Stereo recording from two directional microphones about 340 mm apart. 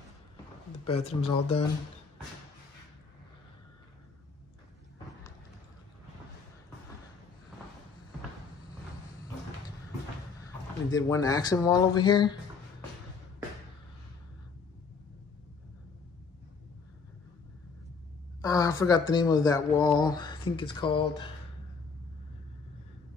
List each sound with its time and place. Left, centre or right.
0.8 s speech: centre
10.9 s speech: centre
18.4 s speech: centre